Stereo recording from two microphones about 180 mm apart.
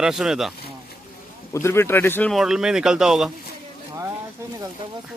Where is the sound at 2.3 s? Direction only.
Centre (ahead or behind).